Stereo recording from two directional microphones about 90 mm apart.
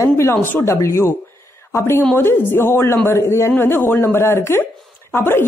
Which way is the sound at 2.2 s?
25° left (ahead or behind).